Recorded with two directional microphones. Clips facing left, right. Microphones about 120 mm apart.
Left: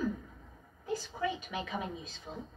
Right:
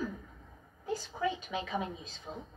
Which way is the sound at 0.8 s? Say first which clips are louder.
Right 1 dB; 20° right (ahead or behind).